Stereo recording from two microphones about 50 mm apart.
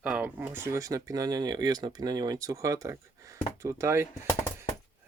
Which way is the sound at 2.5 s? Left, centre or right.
Right.